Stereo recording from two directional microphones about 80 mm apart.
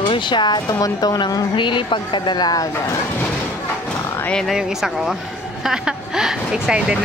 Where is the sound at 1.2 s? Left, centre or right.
Left.